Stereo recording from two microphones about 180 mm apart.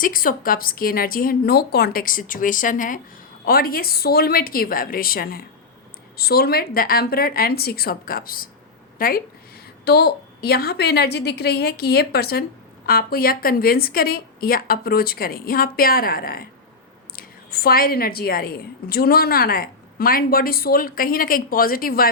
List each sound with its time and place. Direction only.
0.0 s a woman's voice: 50° left (ahead or behind)